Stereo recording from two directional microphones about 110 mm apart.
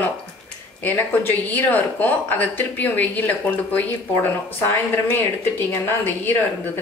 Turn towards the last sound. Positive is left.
turn(degrees=20)  # may be behind; listen again after turning